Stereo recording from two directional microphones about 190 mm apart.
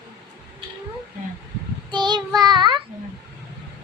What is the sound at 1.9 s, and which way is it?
Child singing, 25° right (ahead or behind).